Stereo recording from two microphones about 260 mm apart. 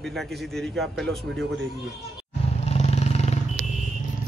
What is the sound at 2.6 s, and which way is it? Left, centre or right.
Vehicle, left.